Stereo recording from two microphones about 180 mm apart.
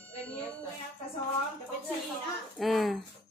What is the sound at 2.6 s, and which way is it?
Speech, centre (ahead or behind).